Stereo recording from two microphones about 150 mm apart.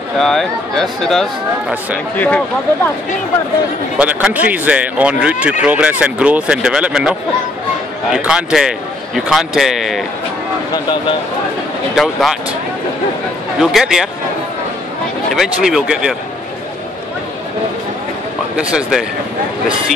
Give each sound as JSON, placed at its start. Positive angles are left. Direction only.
{"t": 0.2, "sound": "speech", "side_deg": 5}
{"t": 4.0, "sound": "speech", "side_deg": -10}
{"t": 10.7, "sound": "speech", "side_deg": 30}
{"t": 11.9, "sound": "speech", "side_deg": 0}
{"t": 13.6, "sound": "speech", "side_deg": 0}
{"t": 15.3, "sound": "speech", "side_deg": -5}
{"t": 18.6, "sound": "speech", "side_deg": -5}